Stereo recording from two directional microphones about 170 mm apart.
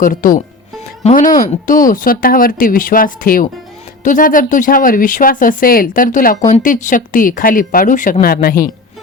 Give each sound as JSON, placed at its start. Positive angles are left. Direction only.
{"t": 0.0, "sound": "speech", "side_deg": 55}